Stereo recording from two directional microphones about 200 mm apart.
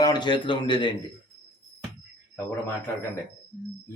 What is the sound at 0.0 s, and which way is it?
Speech, 20° left (ahead or behind).